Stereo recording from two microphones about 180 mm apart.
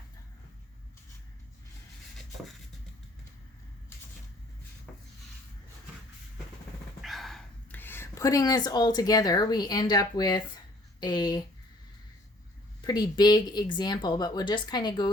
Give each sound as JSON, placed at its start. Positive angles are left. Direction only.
{"t": 4.9, "sound": "rub", "side_deg": 5}
{"t": 7.0, "sound": "speech", "side_deg": 0}
{"t": 12.8, "sound": "speech", "side_deg": 25}